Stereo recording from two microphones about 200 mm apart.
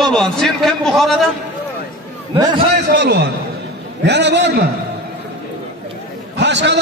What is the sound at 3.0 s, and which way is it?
A man's voice, 60° right (ahead or behind).